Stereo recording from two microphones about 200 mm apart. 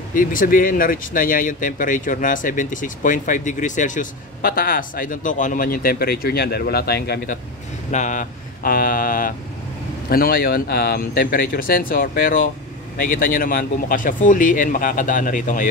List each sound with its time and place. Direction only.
0.1 s speech: 40° left (ahead or behind)
7.9 s speech: 40° left (ahead or behind)